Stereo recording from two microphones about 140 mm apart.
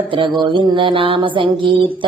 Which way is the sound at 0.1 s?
35° right (ahead or behind).